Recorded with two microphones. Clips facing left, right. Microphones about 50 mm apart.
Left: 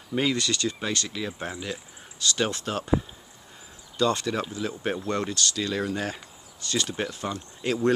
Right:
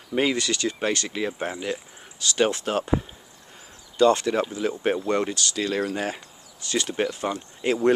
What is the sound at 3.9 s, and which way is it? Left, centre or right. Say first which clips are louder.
Speech: right 6 dB; right.